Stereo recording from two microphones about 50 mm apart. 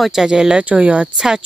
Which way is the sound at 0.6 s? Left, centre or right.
Right.